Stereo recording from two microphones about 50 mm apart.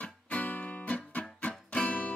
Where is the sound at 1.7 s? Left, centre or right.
Left.